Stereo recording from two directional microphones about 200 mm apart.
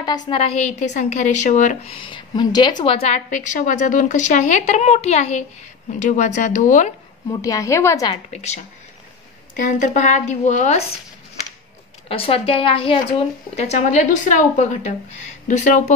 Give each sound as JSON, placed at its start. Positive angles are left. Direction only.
{"t": 0.3, "sound": "a woman's voice", "side_deg": 30}
{"t": 2.0, "sound": "a woman's voice", "side_deg": 25}
{"t": 7.2, "sound": "a woman's voice", "side_deg": 15}
{"t": 8.3, "sound": "a woman's voice", "side_deg": 35}
{"t": 12.1, "sound": "a woman's voice", "side_deg": 30}